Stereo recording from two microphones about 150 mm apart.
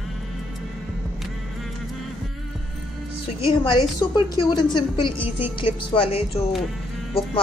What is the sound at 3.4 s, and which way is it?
A woman's voice, 35° left (ahead or behind).